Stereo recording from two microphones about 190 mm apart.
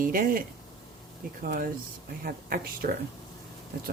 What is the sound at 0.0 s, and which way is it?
Speech, 45° right (ahead or behind).